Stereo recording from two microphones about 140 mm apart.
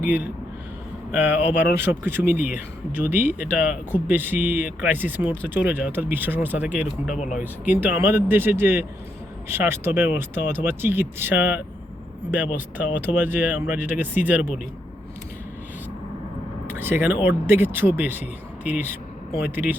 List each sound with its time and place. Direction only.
0.0 s speech: 10° right (ahead or behind)
7.2 s speech: 60° left (ahead or behind)
7.6 s speech: 10° right (ahead or behind)
16.7 s speech: 15° right (ahead or behind)